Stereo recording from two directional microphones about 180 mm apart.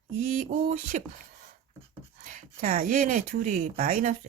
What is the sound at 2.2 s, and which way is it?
Speech, 50° right (ahead or behind).